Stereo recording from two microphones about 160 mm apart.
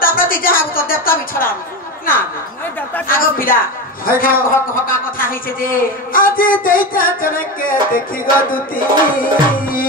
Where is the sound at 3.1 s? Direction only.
60° left (ahead or behind).